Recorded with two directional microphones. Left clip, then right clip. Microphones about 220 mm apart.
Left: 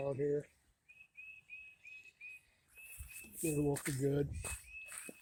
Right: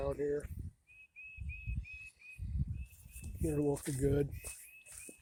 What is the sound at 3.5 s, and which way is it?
Speech, 20° right (ahead or behind).